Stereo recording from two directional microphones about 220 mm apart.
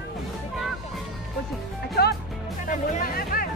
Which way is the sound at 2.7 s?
40° left (ahead or behind).